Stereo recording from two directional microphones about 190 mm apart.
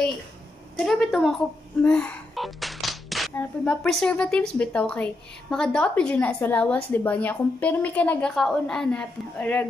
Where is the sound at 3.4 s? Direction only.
5° left (ahead or behind).